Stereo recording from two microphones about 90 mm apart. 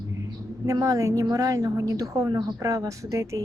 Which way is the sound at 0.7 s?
40° right (ahead or behind).